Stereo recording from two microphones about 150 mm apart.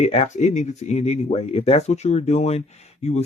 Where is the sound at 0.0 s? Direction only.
45° left (ahead or behind).